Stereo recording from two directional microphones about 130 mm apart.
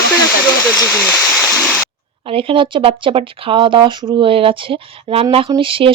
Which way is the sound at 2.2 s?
45° right (ahead or behind).